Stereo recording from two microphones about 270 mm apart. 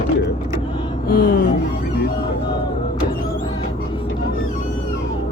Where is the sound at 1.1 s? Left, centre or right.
Left.